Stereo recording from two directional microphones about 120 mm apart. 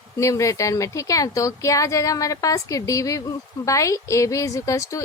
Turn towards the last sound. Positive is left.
turn(degrees=25)  # may be behind; listen again after turning